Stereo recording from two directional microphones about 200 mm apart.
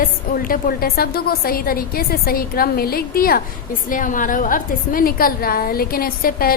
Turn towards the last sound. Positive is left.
turn(degrees=45)  # may be behind; listen again after turning